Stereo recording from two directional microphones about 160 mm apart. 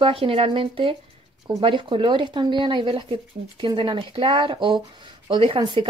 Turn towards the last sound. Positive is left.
turn(degrees=-30)  # may be behind; listen again after turning